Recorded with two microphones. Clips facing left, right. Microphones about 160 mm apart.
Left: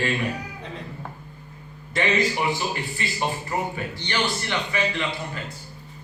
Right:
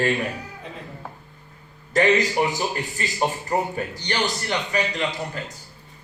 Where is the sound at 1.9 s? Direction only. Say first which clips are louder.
Right 4 dB; 40° right (ahead or behind).